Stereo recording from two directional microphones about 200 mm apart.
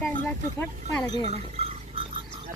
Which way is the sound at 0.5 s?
15° left (ahead or behind).